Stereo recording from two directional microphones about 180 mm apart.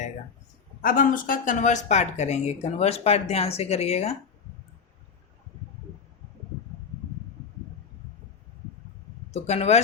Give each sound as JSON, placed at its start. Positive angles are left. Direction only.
{"t": 0.8, "sound": "speech", "side_deg": 50}
{"t": 9.3, "sound": "speech", "side_deg": 35}